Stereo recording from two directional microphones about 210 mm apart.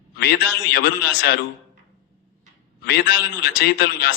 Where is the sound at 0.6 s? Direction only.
50° left (ahead or behind).